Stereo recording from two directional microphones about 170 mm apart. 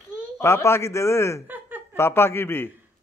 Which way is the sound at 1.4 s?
10° right (ahead or behind).